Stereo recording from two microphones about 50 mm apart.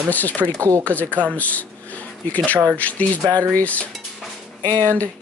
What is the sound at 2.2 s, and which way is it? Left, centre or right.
Speech, left.